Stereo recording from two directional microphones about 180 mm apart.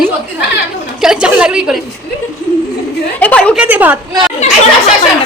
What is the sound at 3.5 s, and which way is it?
Speech, 10° right (ahead or behind).